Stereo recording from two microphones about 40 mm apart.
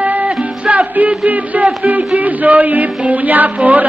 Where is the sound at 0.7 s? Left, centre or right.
Right.